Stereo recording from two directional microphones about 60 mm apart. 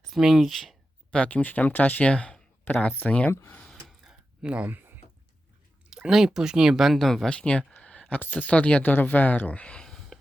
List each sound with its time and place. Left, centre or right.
0.2 s speech: centre
1.1 s speech: left
2.7 s speech: left
3.1 s speech: left
4.0 s a sound: centre; by 4.9 s right
5.9 s speech: centre
7.3 s speech: centre
7.8 s a sound: centre
8.1 s speech: left
10.1 s a sound: centre